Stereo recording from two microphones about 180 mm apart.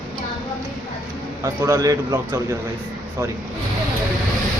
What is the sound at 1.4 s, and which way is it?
Speech, 15° right (ahead or behind).